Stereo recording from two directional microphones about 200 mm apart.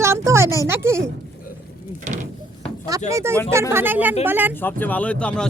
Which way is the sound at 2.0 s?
35° right (ahead or behind).